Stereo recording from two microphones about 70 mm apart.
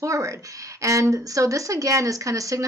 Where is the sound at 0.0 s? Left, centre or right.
Right.